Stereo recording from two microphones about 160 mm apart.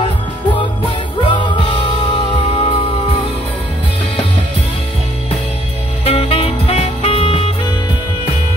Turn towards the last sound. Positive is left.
turn(degrees=35)  # may be behind; listen again after turning